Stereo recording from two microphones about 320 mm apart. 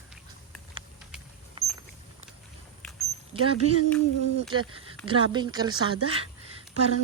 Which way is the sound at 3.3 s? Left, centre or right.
Centre.